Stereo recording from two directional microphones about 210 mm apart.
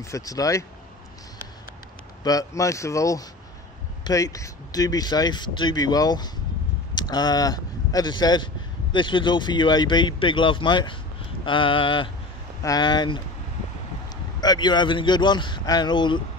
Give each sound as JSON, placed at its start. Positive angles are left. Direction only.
{"t": 0.0, "sound": "speech", "side_deg": 15}
{"t": 2.2, "sound": "speech", "side_deg": 15}
{"t": 14.4, "sound": "speech", "side_deg": 20}